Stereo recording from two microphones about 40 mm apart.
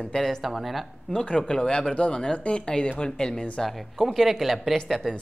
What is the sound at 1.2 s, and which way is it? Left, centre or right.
Speech, centre.